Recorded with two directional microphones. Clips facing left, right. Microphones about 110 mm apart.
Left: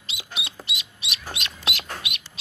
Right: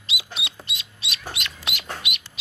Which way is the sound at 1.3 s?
25° left (ahead or behind).